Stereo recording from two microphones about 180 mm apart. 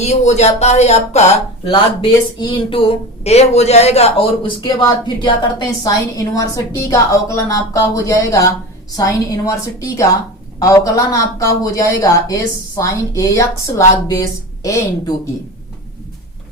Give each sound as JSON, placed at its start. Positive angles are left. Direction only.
{"t": 0.0, "sound": "speech", "side_deg": 40}
{"t": 4.8, "sound": "speech", "side_deg": 25}